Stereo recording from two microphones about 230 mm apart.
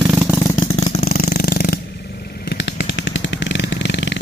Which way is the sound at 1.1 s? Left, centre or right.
Left.